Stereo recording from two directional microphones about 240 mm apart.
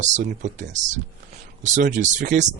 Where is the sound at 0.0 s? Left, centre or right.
Right.